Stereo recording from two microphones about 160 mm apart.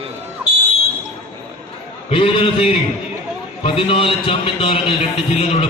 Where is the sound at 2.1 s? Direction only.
35° left (ahead or behind).